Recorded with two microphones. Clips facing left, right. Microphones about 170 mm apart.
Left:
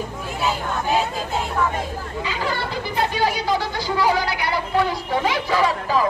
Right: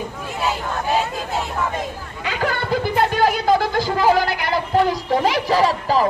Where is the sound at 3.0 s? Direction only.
50° right (ahead or behind).